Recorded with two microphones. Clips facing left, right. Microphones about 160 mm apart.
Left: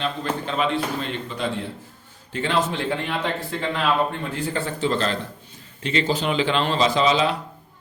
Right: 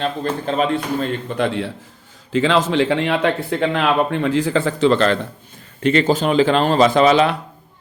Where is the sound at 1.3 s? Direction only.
70° right (ahead or behind).